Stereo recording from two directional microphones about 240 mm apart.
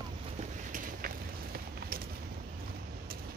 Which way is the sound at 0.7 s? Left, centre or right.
Right.